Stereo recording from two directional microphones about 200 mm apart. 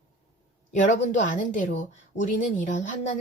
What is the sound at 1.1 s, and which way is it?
A woman's voice, 40° left (ahead or behind).